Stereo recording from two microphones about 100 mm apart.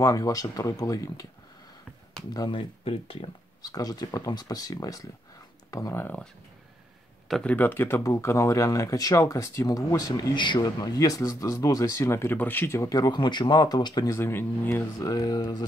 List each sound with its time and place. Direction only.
0.0 s speech: 35° left (ahead or behind)
2.5 s speech: 70° left (ahead or behind)
3.6 s speech: 40° left (ahead or behind)
7.2 s speech: 5° left (ahead or behind)
7.5 s speech: 20° left (ahead or behind)
10.3 s speech: 50° left (ahead or behind)
14.1 s speech: 25° left (ahead or behind)
15.0 s speech: 35° left (ahead or behind)